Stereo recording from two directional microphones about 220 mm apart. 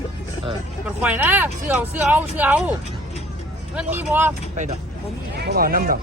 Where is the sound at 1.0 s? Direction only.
10° right (ahead or behind).